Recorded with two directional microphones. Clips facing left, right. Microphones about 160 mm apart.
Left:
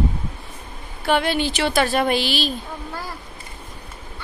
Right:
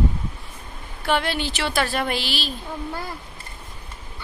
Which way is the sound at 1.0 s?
10° left (ahead or behind).